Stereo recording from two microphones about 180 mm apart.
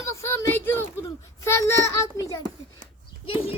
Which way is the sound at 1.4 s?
15° left (ahead or behind).